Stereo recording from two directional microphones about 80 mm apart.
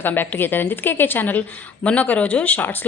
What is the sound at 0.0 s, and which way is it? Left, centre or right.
A woman's voice, left.